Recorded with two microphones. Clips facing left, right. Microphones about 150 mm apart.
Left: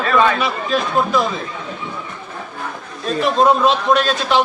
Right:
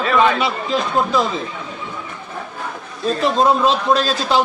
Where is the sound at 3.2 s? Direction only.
30° right (ahead or behind).